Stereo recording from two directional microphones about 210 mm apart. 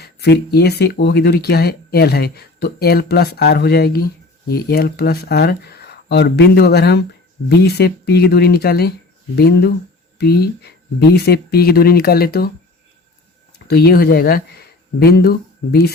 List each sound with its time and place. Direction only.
0.0 s speech: 50° left (ahead or behind)
13.7 s speech: 50° left (ahead or behind)